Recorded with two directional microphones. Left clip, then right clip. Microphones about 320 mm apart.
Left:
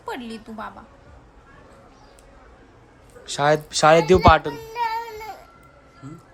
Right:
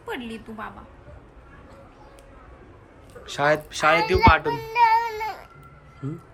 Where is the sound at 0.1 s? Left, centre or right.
Left.